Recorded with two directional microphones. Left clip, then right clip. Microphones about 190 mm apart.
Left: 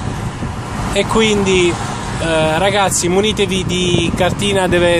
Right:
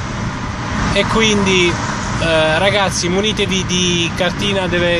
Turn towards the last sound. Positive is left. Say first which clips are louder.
# left 3 dB
turn(degrees=15)  # may be behind; listen again after turning